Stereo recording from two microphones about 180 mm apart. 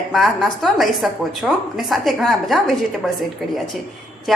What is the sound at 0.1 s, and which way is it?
A woman's voice, centre (ahead or behind).